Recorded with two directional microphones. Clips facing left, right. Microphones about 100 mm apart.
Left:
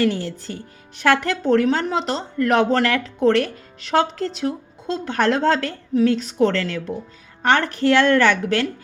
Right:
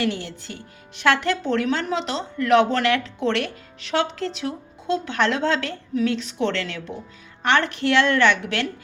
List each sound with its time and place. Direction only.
0.0 s a woman's voice: 45° left (ahead or behind)